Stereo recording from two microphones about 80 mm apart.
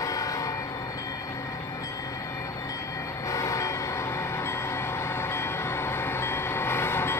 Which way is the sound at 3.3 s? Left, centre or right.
Left.